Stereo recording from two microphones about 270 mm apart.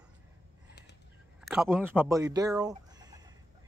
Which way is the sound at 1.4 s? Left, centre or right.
Centre.